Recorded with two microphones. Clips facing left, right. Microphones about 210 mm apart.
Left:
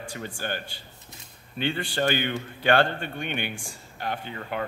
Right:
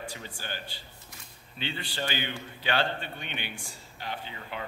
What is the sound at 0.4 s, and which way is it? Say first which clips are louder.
A man's voice: left 7 dB; 55° left (ahead or behind).